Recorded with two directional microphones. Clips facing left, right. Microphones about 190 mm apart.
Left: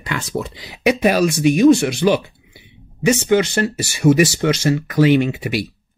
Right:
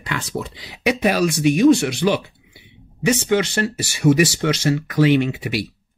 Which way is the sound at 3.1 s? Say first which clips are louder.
Left 3 dB; 45° left (ahead or behind).